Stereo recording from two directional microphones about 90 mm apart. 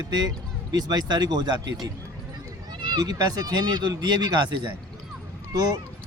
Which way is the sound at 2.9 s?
45° right (ahead or behind).